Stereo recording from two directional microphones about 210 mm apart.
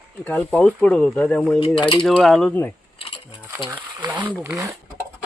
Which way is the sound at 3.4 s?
10° right (ahead or behind).